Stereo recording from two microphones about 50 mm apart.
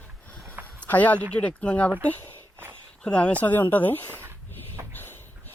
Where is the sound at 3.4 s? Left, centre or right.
Left.